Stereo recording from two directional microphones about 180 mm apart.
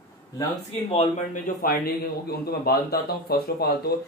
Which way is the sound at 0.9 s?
40° left (ahead or behind).